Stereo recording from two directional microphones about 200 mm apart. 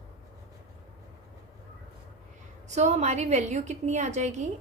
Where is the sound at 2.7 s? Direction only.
35° right (ahead or behind).